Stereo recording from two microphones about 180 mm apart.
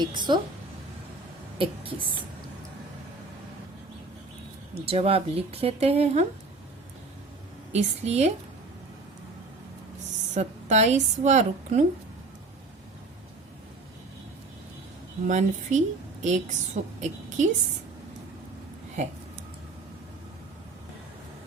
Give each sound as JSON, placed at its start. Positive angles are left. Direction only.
{"t": 0.0, "sound": "a woman's voice", "side_deg": -25}
{"t": 4.7, "sound": "speech", "side_deg": -35}
{"t": 7.7, "sound": "speech", "side_deg": -35}
{"t": 10.3, "sound": "speech", "side_deg": -40}
{"t": 15.3, "sound": "speech", "side_deg": -40}
{"t": 19.0, "sound": "speech", "side_deg": -40}